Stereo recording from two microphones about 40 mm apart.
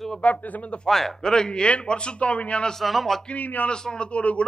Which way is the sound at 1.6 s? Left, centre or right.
Left.